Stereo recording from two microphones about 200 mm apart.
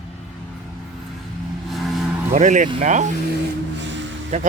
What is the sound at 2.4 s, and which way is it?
Speech, 40° right (ahead or behind).